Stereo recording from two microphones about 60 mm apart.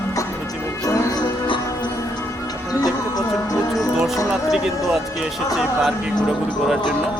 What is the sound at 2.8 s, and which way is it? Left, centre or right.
Music, left.